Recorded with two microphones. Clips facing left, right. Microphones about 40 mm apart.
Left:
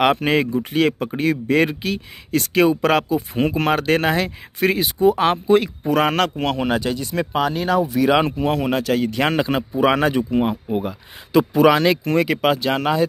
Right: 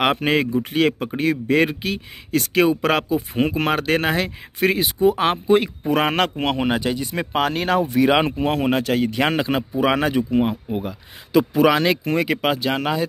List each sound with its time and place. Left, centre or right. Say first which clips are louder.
0.0 s speech: left 2 dB; centre; by 7.2 s right
7.3 s speech: even; right
7.9 s speech: even; right; by 10.5 s centre
10.7 s speech: left 3 dB; centre
11.5 s speech: left 3 dB; centre